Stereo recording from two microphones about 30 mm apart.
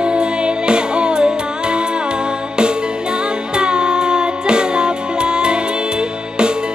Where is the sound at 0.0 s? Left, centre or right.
Right.